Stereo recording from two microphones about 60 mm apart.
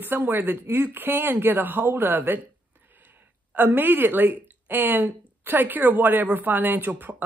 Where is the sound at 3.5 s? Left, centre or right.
Right.